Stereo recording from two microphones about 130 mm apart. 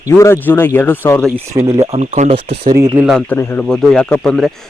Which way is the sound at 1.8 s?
60° right (ahead or behind).